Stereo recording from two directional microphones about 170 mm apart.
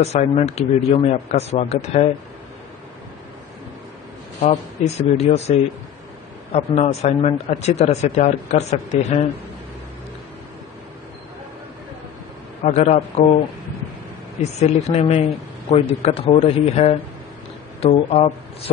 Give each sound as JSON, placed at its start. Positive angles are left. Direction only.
{"t": 0.0, "sound": "a man's voice", "side_deg": 40}
{"t": 4.4, "sound": "a man's voice", "side_deg": 40}
{"t": 6.5, "sound": "a man's voice", "side_deg": 40}
{"t": 12.6, "sound": "a man's voice", "side_deg": 40}
{"t": 14.6, "sound": "a man's voice", "side_deg": 40}